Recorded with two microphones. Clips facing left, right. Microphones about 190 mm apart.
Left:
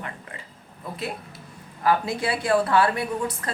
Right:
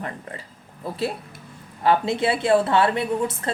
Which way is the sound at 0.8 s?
30° right (ahead or behind).